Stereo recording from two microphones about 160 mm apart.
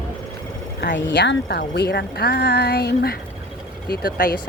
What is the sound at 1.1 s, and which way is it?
Speech, 90° left.